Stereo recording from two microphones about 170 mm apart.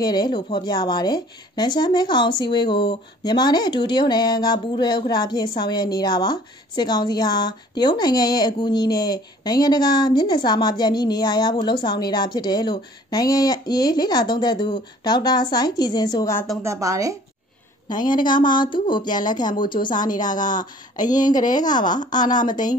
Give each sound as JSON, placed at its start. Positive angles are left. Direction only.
{"t": 0.0, "sound": "a woman's voice", "side_deg": 25}
{"t": 16.6, "sound": "speech", "side_deg": -20}
{"t": 17.8, "sound": "a woman's voice", "side_deg": 25}
{"t": 20.2, "sound": "speech", "side_deg": 50}
{"t": 21.1, "sound": "a woman's voice", "side_deg": 25}